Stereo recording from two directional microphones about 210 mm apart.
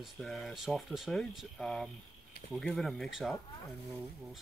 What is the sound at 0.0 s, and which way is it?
Speech, centre (ahead or behind).